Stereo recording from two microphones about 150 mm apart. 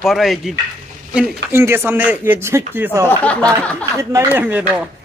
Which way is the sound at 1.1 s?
15° right (ahead or behind).